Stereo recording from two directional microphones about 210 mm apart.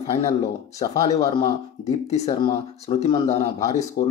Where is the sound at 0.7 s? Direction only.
30° left (ahead or behind).